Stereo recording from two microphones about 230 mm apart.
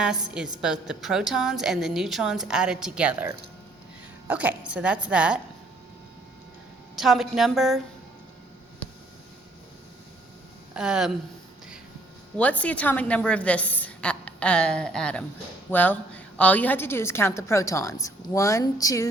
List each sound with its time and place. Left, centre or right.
0.3 s a woman's voice: centre
6.9 s a woman's voice: centre
10.8 s a woman's voice: centre
12.4 s a woman's voice: centre